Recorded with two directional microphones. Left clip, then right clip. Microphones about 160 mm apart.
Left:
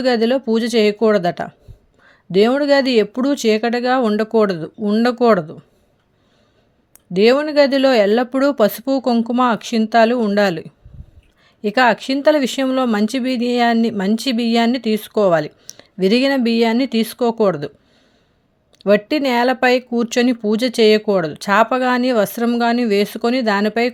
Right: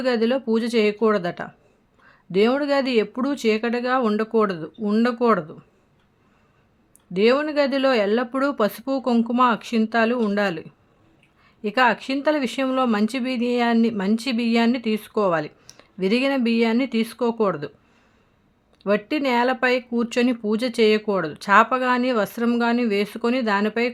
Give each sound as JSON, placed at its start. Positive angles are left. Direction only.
{"t": 0.0, "sound": "speech", "side_deg": 30}
{"t": 7.1, "sound": "speech", "side_deg": 30}
{"t": 18.8, "sound": "speech", "side_deg": 30}